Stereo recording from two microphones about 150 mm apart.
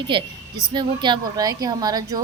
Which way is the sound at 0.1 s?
35° right (ahead or behind).